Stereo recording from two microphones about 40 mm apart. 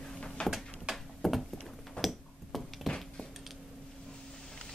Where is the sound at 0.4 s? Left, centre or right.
Left.